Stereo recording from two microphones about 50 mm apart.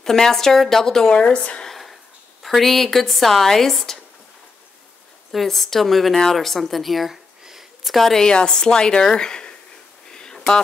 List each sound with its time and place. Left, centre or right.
0.0 s a woman's voice: centre
1.2 s speech: left
1.7 s a sound: centre
2.4 s a woman's voice: centre
5.3 s a woman's voice: centre
10.1 s a sound: centre